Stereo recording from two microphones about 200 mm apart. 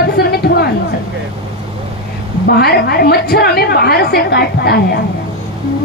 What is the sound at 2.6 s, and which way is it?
A woman's voice, 50° left (ahead or behind).